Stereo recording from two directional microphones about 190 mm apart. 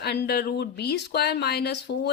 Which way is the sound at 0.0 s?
60° left (ahead or behind).